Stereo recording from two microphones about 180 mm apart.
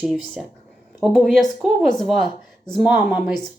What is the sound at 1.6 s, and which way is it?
Speech, centre (ahead or behind).